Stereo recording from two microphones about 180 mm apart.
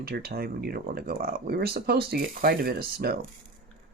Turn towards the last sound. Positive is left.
turn(degrees=-60)  # may be behind; listen again after turning